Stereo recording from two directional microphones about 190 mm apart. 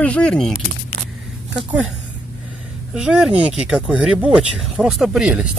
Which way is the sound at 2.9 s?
5° right (ahead or behind).